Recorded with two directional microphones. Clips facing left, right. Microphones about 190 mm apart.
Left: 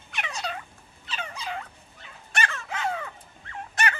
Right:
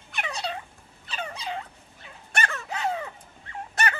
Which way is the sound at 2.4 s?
40° right (ahead or behind).